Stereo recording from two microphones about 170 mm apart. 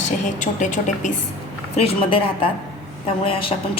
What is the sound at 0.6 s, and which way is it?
Speech, 45° left (ahead or behind).